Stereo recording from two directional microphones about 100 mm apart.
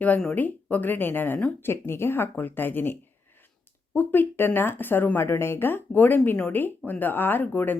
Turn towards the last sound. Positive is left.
turn(degrees=20)  # may be behind; listen again after turning